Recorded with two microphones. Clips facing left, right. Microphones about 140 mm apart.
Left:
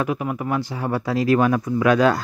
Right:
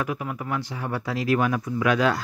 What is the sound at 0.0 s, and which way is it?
Speech, 25° left (ahead or behind).